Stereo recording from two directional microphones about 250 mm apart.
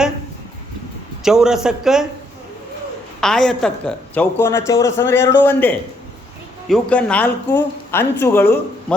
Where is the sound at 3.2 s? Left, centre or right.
Centre.